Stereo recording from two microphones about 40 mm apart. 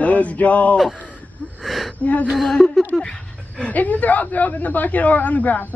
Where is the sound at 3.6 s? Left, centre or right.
Left.